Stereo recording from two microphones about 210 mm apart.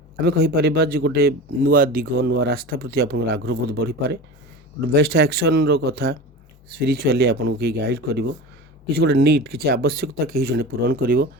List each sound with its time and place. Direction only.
0.3 s speech: 50° right (ahead or behind)